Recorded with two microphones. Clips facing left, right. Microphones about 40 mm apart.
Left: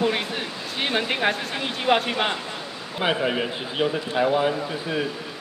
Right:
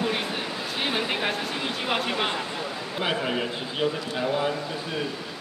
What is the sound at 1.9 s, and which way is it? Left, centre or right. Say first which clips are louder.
A man's voice: left 6 dB; left.